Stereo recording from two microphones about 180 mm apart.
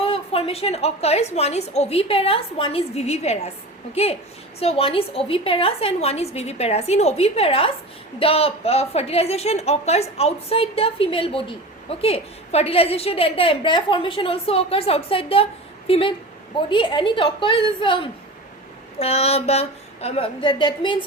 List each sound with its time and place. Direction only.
0.0 s a woman's voice: 30° left (ahead or behind)